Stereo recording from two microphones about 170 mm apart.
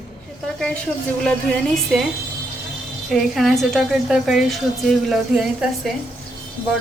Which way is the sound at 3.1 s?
Centre (ahead or behind).